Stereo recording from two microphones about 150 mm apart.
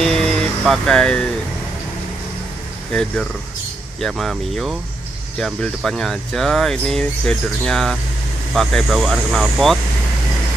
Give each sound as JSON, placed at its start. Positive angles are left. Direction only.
{"t": 0.0, "sound": "music", "side_deg": 5}
{"t": 2.9, "sound": "speech", "side_deg": 5}